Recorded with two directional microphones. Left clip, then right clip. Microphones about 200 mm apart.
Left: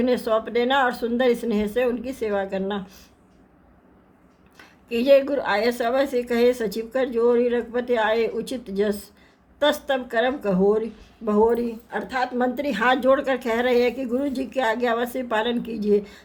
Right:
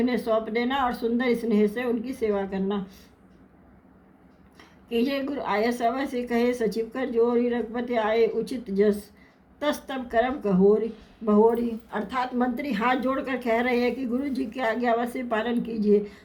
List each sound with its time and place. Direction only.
0.0 s a woman's voice: 45° left (ahead or behind)
4.5 s a woman's voice: 45° left (ahead or behind)